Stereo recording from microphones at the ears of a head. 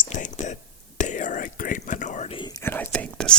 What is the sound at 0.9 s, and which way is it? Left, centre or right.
Whispering, left.